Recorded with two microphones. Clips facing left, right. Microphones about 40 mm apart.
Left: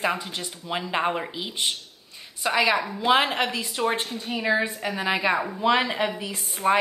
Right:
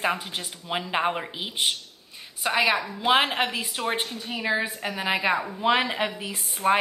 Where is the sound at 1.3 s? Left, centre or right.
Centre.